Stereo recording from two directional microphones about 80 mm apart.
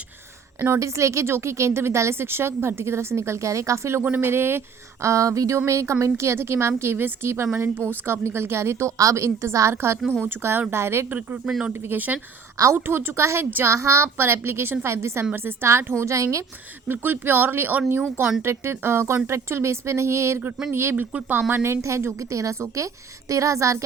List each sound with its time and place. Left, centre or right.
0.6 s a woman's voice: right
4.0 s a woman's voice: right
13.7 s a woman's voice: right
16.9 s a woman's voice: right
20.9 s a woman's voice: centre
21.5 s a woman's voice: right